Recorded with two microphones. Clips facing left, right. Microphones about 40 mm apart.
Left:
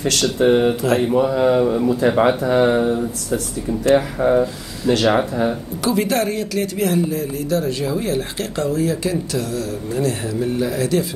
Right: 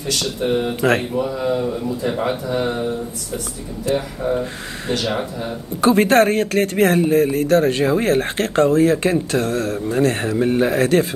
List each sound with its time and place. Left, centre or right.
0.0 s speech: left
0.7 s mantra: right
1.3 s a man's voice: left
2.4 s speech: left
3.8 s speech: left
5.8 s speech: right